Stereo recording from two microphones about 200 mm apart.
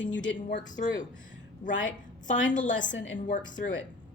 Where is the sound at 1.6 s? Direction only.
40° left (ahead or behind).